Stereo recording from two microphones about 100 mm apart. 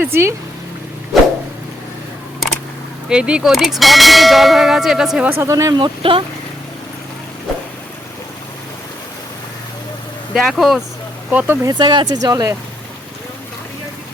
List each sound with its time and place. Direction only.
0.0 s speech: 25° right (ahead or behind)
3.1 s a sound: 10° right (ahead or behind)
5.4 s speech: 30° right (ahead or behind)
5.8 s speech: 60° right (ahead or behind)
10.3 s a sound: 5° right (ahead or behind)
11.3 s speech: 15° right (ahead or behind)
11.6 s speech: 45° right (ahead or behind)